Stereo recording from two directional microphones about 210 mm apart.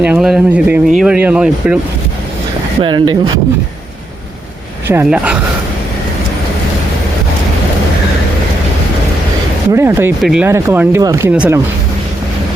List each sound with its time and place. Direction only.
0.0 s speech: 5° right (ahead or behind)
2.8 s speech: 20° right (ahead or behind)
4.9 s speech: 10° right (ahead or behind)
9.7 s speech: 10° right (ahead or behind)